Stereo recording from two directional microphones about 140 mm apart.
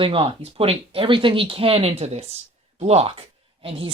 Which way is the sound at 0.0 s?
40° right (ahead or behind).